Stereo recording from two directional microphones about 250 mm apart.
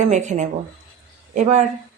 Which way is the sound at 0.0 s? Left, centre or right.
Right.